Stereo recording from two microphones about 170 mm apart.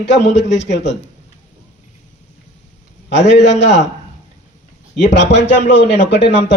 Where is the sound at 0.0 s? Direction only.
90° left.